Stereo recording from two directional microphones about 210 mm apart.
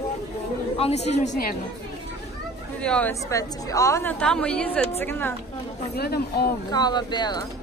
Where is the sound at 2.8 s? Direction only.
5° left (ahead or behind).